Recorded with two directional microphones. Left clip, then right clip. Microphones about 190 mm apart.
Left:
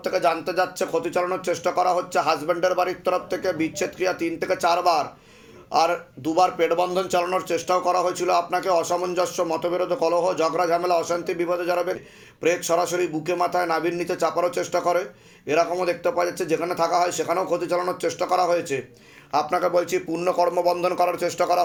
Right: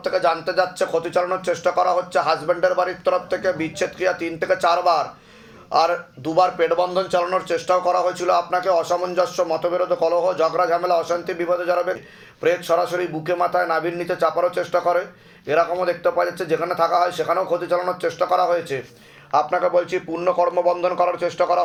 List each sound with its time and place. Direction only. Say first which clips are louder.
0.0 s speech: right 2 dB; 35° left (ahead or behind)